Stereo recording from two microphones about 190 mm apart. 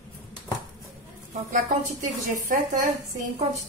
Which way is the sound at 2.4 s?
45° right (ahead or behind).